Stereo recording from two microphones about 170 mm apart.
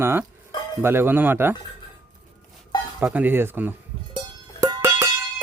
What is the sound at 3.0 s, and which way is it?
Speech, 10° right (ahead or behind).